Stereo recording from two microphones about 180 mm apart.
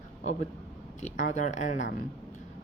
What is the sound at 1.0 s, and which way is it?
Speech, 45° left (ahead or behind).